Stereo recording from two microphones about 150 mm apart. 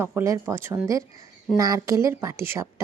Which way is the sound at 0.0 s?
15° right (ahead or behind).